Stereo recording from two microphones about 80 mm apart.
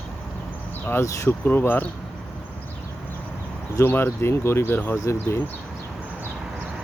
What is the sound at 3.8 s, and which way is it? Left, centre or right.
Speech, left.